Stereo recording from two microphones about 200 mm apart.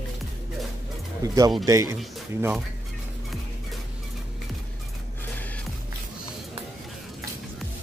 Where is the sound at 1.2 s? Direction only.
20° right (ahead or behind).